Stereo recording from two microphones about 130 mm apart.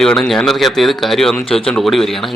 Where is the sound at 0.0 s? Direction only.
5° left (ahead or behind).